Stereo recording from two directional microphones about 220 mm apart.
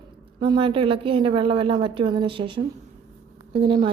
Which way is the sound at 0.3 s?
20° right (ahead or behind).